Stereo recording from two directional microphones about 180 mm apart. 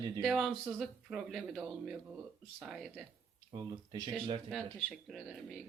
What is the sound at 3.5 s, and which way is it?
Speech, 20° right (ahead or behind).